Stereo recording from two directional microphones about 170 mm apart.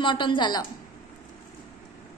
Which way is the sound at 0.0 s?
30° left (ahead or behind).